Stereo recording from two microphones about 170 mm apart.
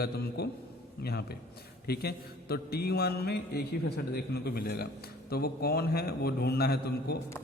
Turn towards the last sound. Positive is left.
turn(degrees=70)  # may be behind; listen again after turning